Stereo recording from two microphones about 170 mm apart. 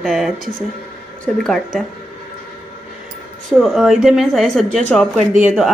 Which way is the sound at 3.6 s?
Centre (ahead or behind).